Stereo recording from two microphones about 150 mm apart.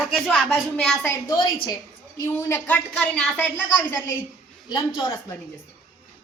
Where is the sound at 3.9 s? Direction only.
20° left (ahead or behind).